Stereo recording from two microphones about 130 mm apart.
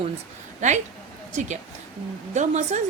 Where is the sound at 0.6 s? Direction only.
65° right (ahead or behind).